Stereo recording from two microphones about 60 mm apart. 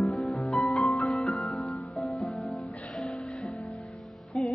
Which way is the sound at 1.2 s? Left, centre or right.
Centre.